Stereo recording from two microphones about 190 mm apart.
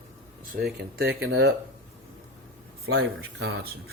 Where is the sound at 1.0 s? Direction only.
90° right.